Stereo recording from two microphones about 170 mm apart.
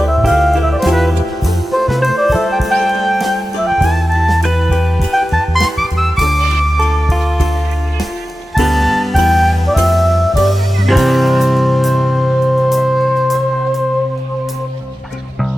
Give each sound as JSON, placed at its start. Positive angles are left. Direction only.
{"t": 0.0, "sound": "music", "side_deg": 0}
{"t": 8.5, "sound": "music", "side_deg": 0}